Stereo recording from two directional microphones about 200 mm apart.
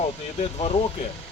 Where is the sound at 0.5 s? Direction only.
30° left (ahead or behind).